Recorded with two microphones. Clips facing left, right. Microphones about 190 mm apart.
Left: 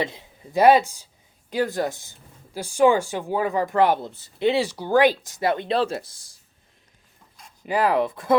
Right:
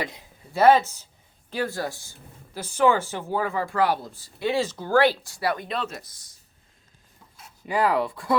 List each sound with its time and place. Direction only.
0.0 s speech: 20° left (ahead or behind)
7.6 s speech: 20° left (ahead or behind)